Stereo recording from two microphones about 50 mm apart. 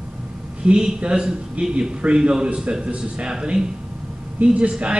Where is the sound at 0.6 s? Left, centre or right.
Centre.